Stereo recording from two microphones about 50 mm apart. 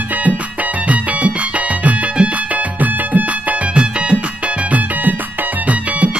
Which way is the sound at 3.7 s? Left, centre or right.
Right.